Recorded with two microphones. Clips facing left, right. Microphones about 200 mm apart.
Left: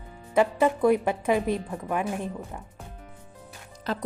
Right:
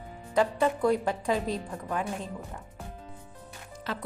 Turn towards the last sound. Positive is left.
turn(degrees=40)  # may be behind; listen again after turning